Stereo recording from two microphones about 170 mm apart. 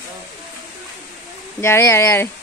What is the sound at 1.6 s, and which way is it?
Speech, 15° left (ahead or behind).